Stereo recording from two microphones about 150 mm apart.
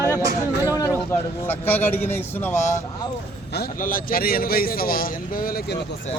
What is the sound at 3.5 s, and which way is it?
A man's voice, 80° left.